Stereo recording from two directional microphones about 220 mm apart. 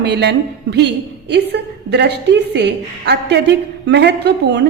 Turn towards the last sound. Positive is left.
turn(degrees=-50)  # may be behind; listen again after turning